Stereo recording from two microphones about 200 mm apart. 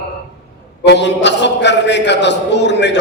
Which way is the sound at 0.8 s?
60° left (ahead or behind).